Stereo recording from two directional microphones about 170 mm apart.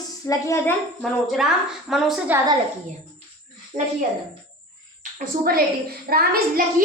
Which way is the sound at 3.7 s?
45° right (ahead or behind).